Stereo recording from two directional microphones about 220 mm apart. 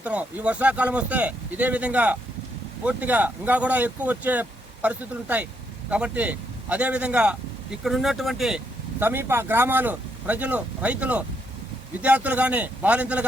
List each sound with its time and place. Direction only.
0.0 s speech: 5° right (ahead or behind)